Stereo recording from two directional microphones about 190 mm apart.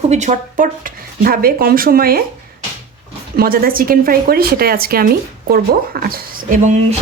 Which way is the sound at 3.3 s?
50° right (ahead or behind).